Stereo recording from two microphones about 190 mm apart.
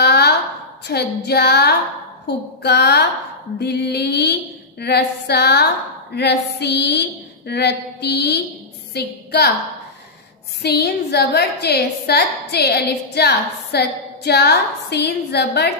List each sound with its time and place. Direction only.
0.0 s a sound: 60° left (ahead or behind)
0.8 s a woman's voice: 60° left (ahead or behind)
10.6 s a woman's voice: 60° left (ahead or behind)